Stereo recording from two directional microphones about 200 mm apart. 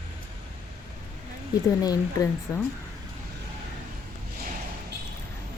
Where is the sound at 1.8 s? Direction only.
15° left (ahead or behind).